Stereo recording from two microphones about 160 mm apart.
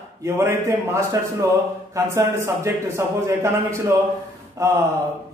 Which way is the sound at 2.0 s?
15° right (ahead or behind).